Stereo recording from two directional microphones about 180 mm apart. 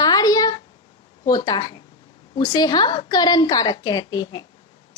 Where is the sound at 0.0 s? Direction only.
20° left (ahead or behind).